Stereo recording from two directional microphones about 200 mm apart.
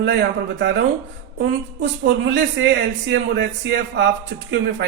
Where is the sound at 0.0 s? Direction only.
60° right (ahead or behind).